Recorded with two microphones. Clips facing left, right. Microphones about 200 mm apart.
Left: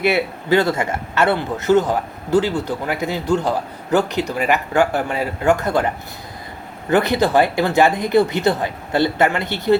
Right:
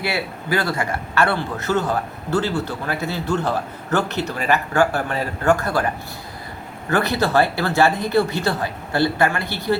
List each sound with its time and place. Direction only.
0.0 s a man's voice: 20° left (ahead or behind)
6.9 s a man's voice: 20° left (ahead or behind)